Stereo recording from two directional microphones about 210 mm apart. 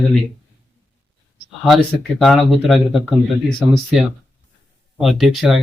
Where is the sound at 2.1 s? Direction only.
Centre (ahead or behind).